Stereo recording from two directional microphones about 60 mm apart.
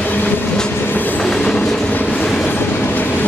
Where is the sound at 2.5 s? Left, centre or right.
Left.